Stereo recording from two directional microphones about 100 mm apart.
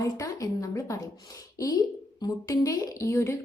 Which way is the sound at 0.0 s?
35° left (ahead or behind).